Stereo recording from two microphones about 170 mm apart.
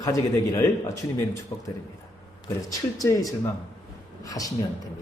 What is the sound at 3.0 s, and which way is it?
Speech, 20° left (ahead or behind).